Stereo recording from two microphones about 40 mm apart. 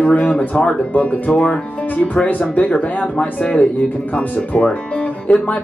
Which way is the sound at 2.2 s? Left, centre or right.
Left.